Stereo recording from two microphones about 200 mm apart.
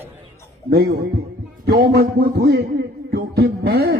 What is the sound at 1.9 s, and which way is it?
Speech, 50° right (ahead or behind).